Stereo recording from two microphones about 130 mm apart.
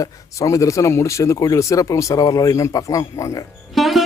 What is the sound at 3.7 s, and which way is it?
Speech, centre (ahead or behind).